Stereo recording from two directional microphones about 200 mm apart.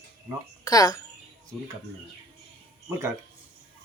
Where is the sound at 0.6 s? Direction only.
20° left (ahead or behind).